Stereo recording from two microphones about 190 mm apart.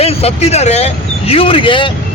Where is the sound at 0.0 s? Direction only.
30° left (ahead or behind).